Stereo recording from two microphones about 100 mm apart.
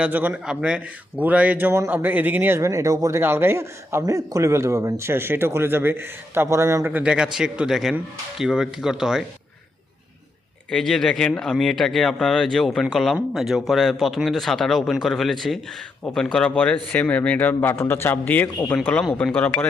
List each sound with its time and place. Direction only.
0.0 s a man's voice: 15° right (ahead or behind)
2.6 s a man's voice: 30° right (ahead or behind); by 9.2 s 5° right (ahead or behind)
10.7 s a man's voice: 5° left (ahead or behind)